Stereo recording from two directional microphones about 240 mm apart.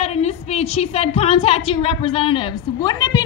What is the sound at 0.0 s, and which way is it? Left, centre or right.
A woman's voice, left.